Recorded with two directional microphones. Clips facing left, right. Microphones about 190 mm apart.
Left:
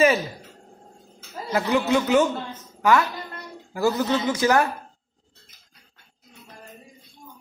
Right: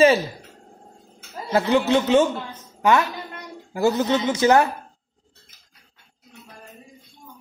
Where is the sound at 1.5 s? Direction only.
30° right (ahead or behind).